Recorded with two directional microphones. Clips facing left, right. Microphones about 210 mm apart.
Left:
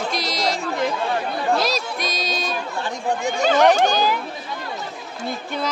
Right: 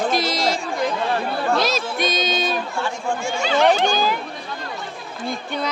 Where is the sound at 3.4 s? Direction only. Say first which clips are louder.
Left 2 dB; 45° left (ahead or behind).